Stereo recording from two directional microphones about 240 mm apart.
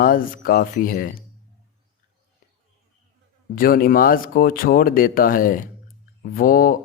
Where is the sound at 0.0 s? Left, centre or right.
Left.